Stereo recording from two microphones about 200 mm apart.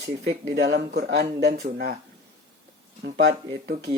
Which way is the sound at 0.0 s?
60° right (ahead or behind).